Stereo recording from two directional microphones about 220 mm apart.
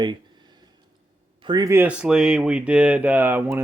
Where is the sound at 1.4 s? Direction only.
20° right (ahead or behind).